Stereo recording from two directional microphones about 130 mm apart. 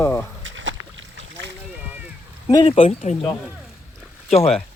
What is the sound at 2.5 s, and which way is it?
Speech, 40° left (ahead or behind).